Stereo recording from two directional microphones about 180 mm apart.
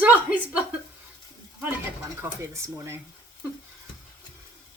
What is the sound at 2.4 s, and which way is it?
Speech, 15° right (ahead or behind).